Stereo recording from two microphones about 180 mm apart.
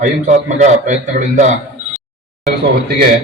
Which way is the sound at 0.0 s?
45° right (ahead or behind).